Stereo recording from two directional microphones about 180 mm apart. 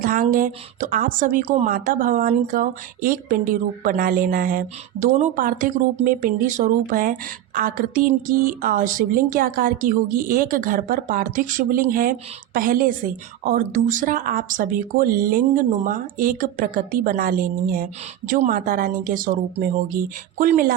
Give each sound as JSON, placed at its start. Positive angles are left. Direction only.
{"t": 0.0, "sound": "a woman's voice", "side_deg": -50}